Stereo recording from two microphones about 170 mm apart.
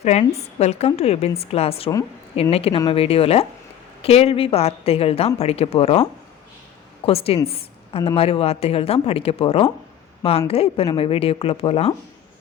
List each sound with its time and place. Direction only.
0.0 s a woman's voice: 40° left (ahead or behind)